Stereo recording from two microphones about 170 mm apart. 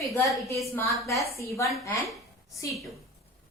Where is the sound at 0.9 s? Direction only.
Centre (ahead or behind).